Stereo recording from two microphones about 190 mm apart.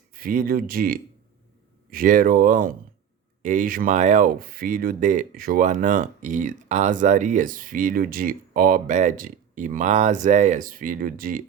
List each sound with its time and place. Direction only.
0.1 s speech: 50° right (ahead or behind)